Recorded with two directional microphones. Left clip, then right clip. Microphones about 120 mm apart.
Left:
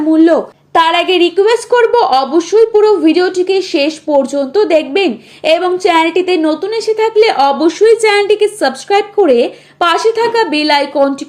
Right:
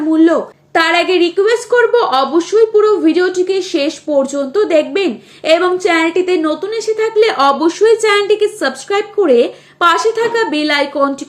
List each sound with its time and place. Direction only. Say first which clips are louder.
0.1 s a woman's voice: left 2 dB; 40° left (ahead or behind)